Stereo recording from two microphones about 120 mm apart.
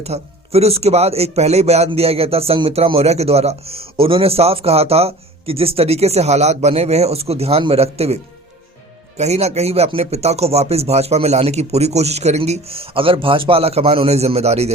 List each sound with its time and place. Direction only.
0.0 s a man's voice: 60° right (ahead or behind)
12.4 s a man's voice: 55° right (ahead or behind)